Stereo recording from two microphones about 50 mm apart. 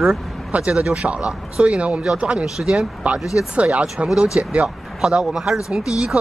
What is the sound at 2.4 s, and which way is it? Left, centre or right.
Speech, centre.